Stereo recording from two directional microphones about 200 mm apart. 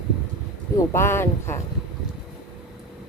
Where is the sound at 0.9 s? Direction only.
10° left (ahead or behind).